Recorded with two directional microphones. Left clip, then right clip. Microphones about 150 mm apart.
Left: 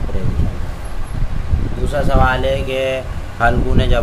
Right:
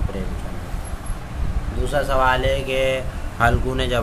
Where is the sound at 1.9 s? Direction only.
15° right (ahead or behind).